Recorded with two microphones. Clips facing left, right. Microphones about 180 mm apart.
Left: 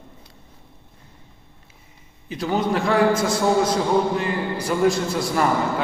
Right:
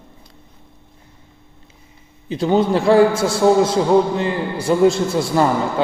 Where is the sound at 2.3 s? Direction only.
30° right (ahead or behind).